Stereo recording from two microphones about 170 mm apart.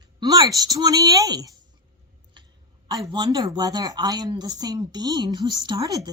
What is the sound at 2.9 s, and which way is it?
A woman's voice, 25° right (ahead or behind).